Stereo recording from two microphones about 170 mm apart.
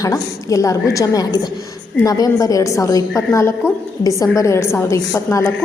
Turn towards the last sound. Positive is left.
turn(degrees=15)  # may be behind; listen again after turning